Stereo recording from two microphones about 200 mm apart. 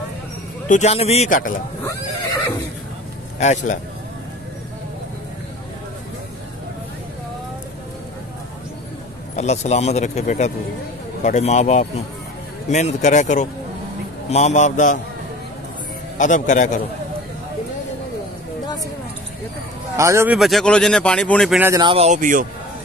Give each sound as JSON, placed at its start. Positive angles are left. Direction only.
{"t": 0.7, "sound": "speech", "side_deg": 35}
{"t": 3.3, "sound": "speech", "side_deg": 35}
{"t": 9.3, "sound": "speech", "side_deg": 35}
{"t": 16.2, "sound": "speech", "side_deg": 40}
{"t": 20.0, "sound": "speech", "side_deg": -15}
{"t": 20.3, "sound": "speech", "side_deg": 0}
{"t": 21.6, "sound": "speech", "side_deg": -20}